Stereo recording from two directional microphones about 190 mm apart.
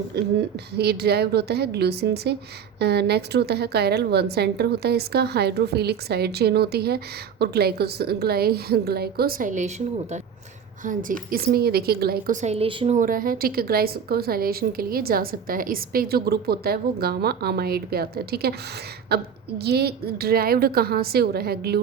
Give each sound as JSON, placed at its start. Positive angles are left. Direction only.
{"t": 0.1, "sound": "a woman's voice", "side_deg": -60}
{"t": 10.8, "sound": "a woman's voice", "side_deg": -50}
{"t": 13.0, "sound": "a woman's voice", "side_deg": -45}